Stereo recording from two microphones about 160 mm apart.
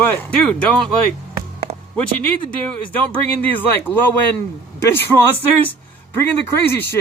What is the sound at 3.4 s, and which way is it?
Speech, 10° left (ahead or behind).